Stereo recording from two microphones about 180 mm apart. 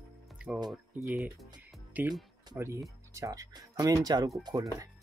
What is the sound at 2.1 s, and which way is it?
Speech, 15° right (ahead or behind).